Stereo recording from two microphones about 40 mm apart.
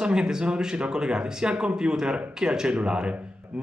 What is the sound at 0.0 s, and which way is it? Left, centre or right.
Speech, right.